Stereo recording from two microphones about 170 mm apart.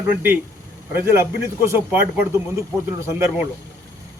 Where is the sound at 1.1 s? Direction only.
15° right (ahead or behind).